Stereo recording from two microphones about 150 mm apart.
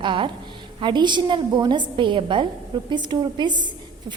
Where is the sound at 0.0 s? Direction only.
35° right (ahead or behind).